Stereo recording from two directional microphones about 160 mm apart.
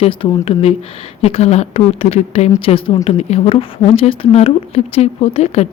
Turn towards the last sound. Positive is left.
turn(degrees=40)  # may be behind; listen again after turning